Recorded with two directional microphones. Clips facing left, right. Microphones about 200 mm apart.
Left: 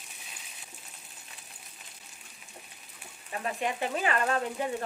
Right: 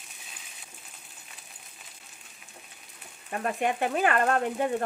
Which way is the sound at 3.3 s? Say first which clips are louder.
Right 4 dB; 55° right (ahead or behind).